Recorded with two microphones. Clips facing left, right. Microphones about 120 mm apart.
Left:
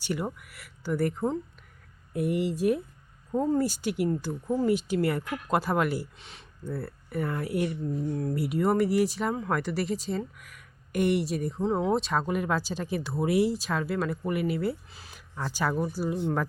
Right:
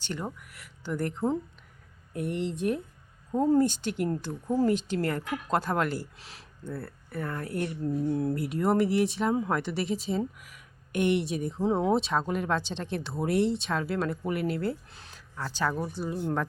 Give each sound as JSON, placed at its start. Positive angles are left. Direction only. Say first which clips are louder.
{"t": 0.0, "sound": "speech", "louder": "left 4 dB", "side_deg": 10}
{"t": 3.7, "sound": "a woman's voice", "louder": "left 2 dB", "side_deg": 10}
{"t": 6.6, "sound": "a woman's voice", "louder": "left 3 dB", "side_deg": 10}